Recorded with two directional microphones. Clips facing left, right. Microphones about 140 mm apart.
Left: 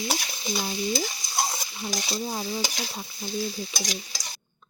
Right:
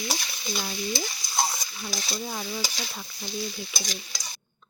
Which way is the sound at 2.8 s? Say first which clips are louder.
Left 3 dB; 35° left (ahead or behind).